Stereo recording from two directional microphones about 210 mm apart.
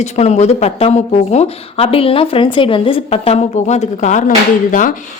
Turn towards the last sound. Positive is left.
turn(degrees=40)  # may be behind; listen again after turning